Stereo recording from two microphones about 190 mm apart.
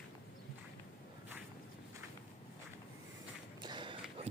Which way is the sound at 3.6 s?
25° right (ahead or behind).